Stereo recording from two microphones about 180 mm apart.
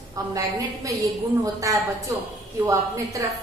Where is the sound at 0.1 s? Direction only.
20° right (ahead or behind).